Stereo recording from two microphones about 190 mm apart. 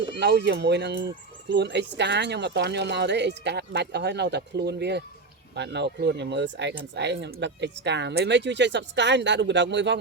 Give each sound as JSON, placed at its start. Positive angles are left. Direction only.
{"t": 0.2, "sound": "speech", "side_deg": -65}